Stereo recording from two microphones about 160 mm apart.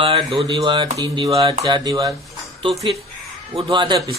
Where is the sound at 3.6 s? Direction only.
30° right (ahead or behind).